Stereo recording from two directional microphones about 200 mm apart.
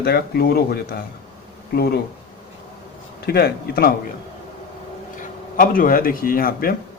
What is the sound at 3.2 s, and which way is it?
Speech, 50° left (ahead or behind).